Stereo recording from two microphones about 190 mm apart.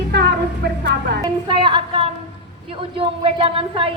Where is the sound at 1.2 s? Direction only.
25° right (ahead or behind).